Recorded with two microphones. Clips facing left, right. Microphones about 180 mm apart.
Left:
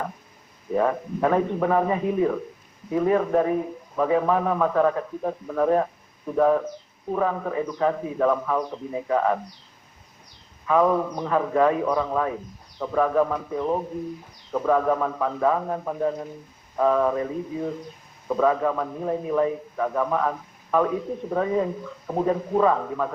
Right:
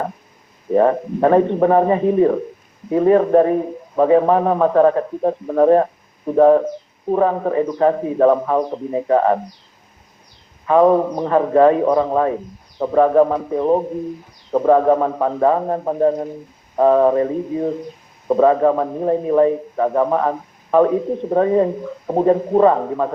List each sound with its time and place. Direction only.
0.7 s a man's voice: 50° right (ahead or behind)
10.7 s a man's voice: 35° right (ahead or behind)